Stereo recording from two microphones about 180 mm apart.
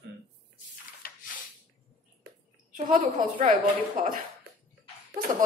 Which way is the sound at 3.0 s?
50° right (ahead or behind).